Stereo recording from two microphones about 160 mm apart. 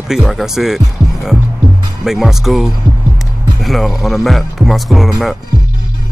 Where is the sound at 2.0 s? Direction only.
Centre (ahead or behind).